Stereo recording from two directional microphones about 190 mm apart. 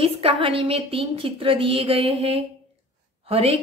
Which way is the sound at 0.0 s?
30° right (ahead or behind).